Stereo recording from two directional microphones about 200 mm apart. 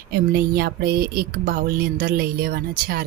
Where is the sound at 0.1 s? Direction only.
50° right (ahead or behind).